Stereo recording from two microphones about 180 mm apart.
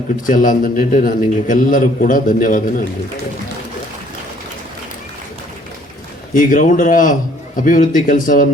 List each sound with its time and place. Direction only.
0.3 s a man's voice: 50° left (ahead or behind)
6.3 s a man's voice: 45° left (ahead or behind)